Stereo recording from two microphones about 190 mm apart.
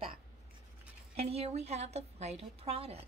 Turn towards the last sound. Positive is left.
turn(degrees=-30)  # may be behind; listen again after turning